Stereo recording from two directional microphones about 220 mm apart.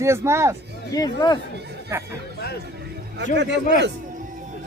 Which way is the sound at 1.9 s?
10° right (ahead or behind).